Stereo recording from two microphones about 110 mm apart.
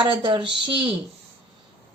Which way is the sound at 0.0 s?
50° right (ahead or behind).